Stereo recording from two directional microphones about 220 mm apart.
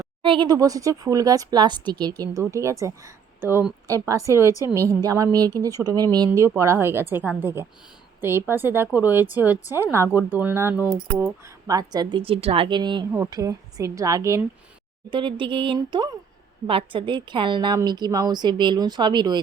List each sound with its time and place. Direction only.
0.0 s a woman's voice: 20° right (ahead or behind)